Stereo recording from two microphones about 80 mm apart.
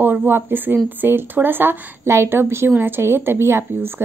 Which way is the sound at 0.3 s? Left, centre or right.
Right.